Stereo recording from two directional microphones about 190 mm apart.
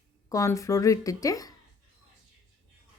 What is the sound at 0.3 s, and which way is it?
Speech, 15° left (ahead or behind).